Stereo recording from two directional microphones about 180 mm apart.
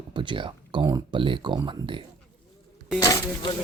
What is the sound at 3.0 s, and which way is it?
Speech, 20° left (ahead or behind).